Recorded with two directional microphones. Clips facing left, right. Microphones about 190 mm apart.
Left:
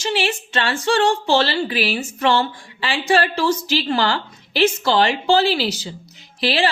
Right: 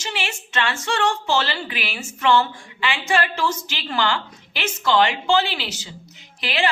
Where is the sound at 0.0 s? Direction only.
35° left (ahead or behind).